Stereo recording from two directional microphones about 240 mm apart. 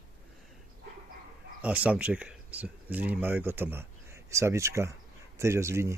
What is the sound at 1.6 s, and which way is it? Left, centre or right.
Speech, centre.